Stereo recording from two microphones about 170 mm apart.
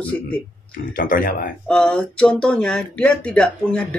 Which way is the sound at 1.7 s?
5° left (ahead or behind).